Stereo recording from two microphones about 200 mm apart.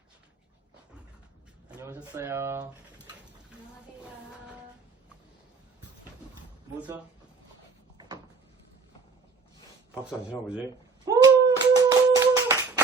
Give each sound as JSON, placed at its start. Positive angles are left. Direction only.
{"t": 1.7, "sound": "speech", "side_deg": -10}
{"t": 7.9, "sound": "door", "side_deg": -20}
{"t": 11.0, "sound": "a sound", "side_deg": -20}